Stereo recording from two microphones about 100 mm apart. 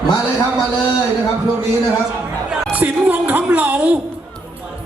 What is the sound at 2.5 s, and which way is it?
Speech, 15° right (ahead or behind).